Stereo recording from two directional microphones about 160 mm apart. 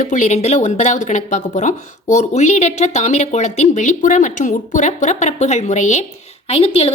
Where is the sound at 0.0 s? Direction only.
50° left (ahead or behind).